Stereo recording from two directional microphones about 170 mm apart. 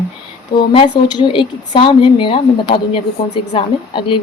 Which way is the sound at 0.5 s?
30° left (ahead or behind).